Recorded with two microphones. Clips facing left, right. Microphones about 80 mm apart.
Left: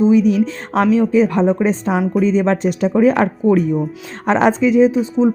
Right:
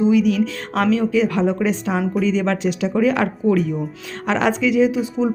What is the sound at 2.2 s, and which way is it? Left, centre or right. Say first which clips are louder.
Speech: left 5 dB; left.